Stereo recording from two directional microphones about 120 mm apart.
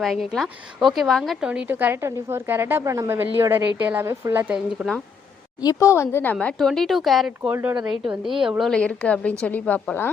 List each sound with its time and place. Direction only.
0.0 s a woman's voice: centre (ahead or behind); by 4.5 s 20° right (ahead or behind)
5.6 s a woman's voice: 25° left (ahead or behind)
6.3 s a woman's voice: 5° left (ahead or behind)
7.4 s a woman's voice: 15° right (ahead or behind)
7.9 s a woman's voice: 5° right (ahead or behind); by 10.1 s 15° left (ahead or behind)